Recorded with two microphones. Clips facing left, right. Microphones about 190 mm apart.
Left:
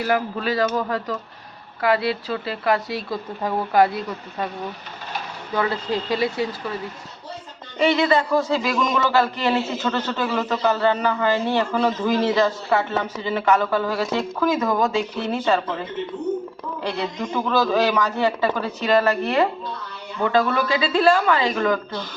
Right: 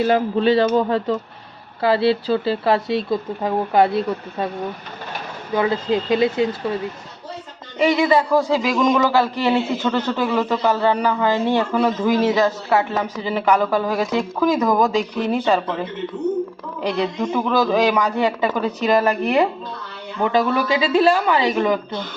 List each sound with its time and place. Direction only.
0.0 s speech: 25° right (ahead or behind)
5.5 s speech: 20° right (ahead or behind)
7.8 s a man's voice: 15° right (ahead or behind)
17.0 s a man's voice: 15° right (ahead or behind)